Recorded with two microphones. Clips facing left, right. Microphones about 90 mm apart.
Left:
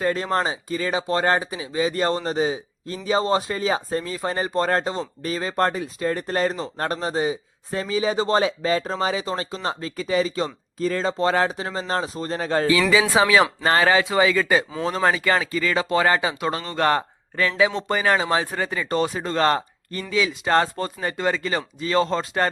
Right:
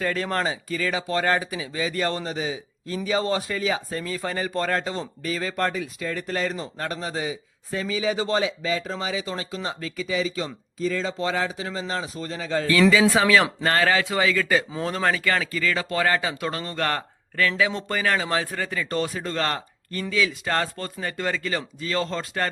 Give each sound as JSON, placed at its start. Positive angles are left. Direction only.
{"t": 0.0, "sound": "speech", "side_deg": 25}
{"t": 2.2, "sound": "speech", "side_deg": 40}
{"t": 12.9, "sound": "speech", "side_deg": 15}